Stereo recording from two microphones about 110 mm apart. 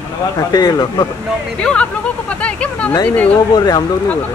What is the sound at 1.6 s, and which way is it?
Speech, 10° left (ahead or behind).